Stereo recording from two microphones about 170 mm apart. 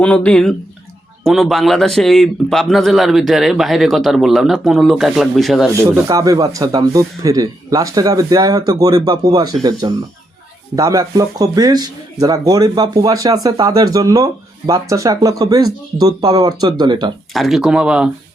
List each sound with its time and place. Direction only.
0.0 s a man's voice: 10° left (ahead or behind)
5.8 s a man's voice: 20° right (ahead or behind)
17.3 s a man's voice: centre (ahead or behind)